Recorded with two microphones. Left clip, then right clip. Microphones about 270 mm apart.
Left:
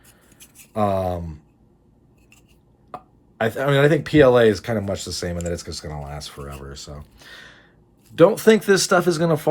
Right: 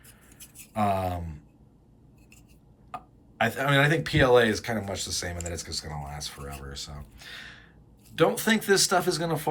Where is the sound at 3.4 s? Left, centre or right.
Centre.